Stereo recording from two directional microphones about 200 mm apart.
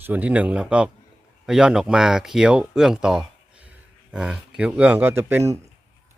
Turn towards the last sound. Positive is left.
turn(degrees=-15)  # may be behind; listen again after turning